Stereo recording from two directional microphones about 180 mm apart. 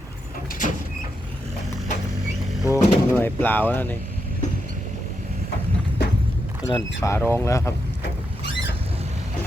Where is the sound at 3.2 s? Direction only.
10° left (ahead or behind).